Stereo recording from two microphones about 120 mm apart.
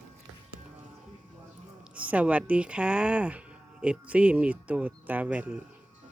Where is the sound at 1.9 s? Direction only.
10° right (ahead or behind).